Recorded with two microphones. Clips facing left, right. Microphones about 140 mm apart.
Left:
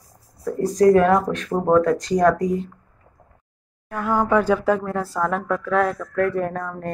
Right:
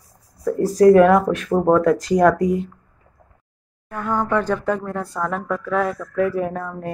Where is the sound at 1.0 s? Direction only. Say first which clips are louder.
Right 4 dB; 5° right (ahead or behind).